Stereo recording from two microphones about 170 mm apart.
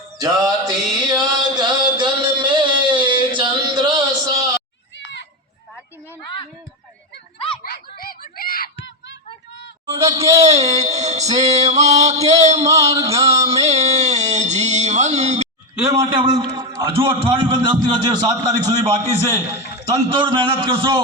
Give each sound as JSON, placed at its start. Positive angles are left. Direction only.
{"t": 0.2, "sound": "mantra", "side_deg": -20}
{"t": 7.6, "sound": "a sound", "side_deg": 60}
{"t": 10.4, "sound": "music", "side_deg": -40}
{"t": 12.9, "sound": "a man's voice", "side_deg": -20}
{"t": 13.6, "sound": "a sound", "side_deg": -40}
{"t": 16.0, "sound": "a man's voice", "side_deg": -25}
{"t": 20.1, "sound": "music", "side_deg": -30}